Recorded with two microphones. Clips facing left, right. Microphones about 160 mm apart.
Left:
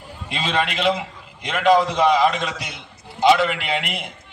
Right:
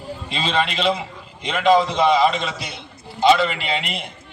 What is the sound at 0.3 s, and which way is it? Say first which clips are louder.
A man's voice: right 1 dB; 15° left (ahead or behind).